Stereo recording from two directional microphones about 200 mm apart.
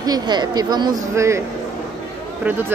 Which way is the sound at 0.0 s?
20° right (ahead or behind).